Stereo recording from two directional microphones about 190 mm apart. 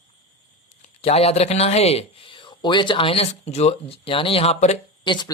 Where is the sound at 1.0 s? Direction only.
35° left (ahead or behind).